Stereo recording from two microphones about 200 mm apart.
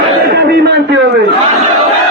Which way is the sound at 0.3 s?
60° right (ahead or behind).